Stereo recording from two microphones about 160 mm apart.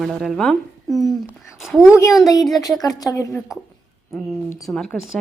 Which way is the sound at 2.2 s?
20° left (ahead or behind).